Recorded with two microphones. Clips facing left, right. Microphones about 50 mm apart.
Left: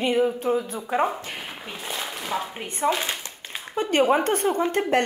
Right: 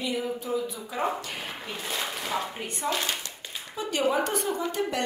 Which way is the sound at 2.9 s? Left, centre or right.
Centre.